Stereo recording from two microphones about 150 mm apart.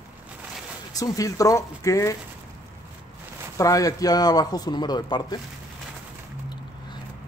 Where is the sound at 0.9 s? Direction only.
25° left (ahead or behind).